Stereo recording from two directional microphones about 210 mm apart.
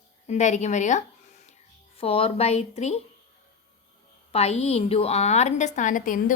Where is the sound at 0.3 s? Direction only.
35° left (ahead or behind).